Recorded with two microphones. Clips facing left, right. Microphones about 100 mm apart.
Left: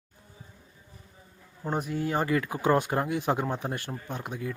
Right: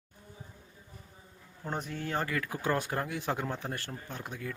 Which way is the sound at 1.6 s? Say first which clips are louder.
Left 7 dB; 10° left (ahead or behind).